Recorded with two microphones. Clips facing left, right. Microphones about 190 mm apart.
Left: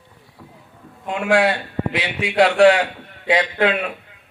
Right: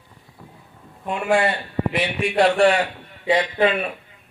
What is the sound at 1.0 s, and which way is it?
A man's voice, 75° left (ahead or behind).